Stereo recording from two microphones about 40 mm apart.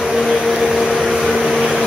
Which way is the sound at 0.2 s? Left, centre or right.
Centre.